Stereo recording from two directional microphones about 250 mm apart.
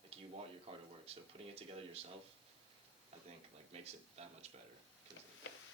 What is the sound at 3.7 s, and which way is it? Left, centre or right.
Speech, right.